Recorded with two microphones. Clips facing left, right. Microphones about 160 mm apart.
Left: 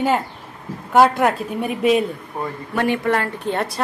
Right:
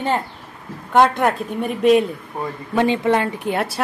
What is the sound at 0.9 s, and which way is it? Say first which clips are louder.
A man's voice: left 1 dB; 5° left (ahead or behind).